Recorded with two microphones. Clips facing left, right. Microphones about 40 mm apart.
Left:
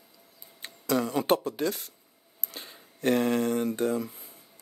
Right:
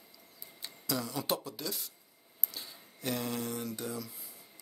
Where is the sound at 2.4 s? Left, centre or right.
Left.